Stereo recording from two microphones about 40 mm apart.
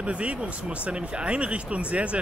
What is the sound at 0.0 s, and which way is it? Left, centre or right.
Speech, right.